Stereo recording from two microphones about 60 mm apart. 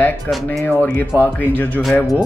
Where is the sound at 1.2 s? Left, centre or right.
Left.